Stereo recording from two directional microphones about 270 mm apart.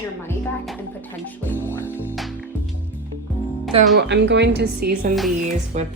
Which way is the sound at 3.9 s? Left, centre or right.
Right.